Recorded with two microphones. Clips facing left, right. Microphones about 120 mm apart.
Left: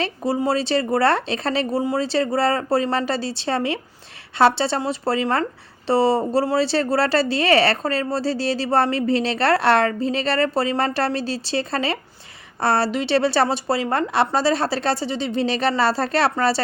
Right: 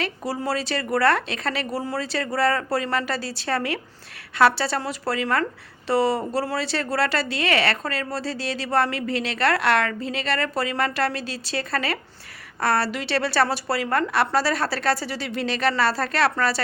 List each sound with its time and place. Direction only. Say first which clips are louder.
0.0 s a woman's voice: left 5 dB; 25° left (ahead or behind)